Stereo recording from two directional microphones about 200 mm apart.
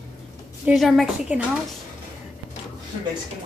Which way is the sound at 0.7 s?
Centre (ahead or behind).